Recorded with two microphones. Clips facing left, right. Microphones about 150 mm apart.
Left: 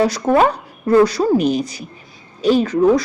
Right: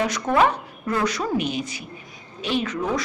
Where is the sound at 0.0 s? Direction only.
35° left (ahead or behind).